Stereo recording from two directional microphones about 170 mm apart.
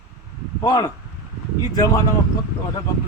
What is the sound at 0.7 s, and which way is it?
Speech, 20° left (ahead or behind).